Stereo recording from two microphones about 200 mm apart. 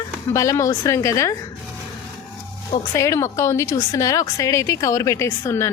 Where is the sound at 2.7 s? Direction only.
15° left (ahead or behind).